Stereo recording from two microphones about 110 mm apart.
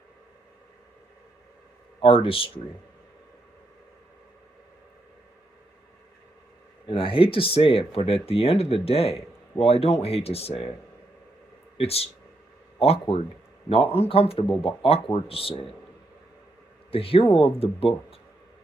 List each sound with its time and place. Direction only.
2.0 s speech: 55° left (ahead or behind)
6.8 s speech: 55° left (ahead or behind)
11.8 s speech: 65° left (ahead or behind)
16.9 s speech: 60° left (ahead or behind)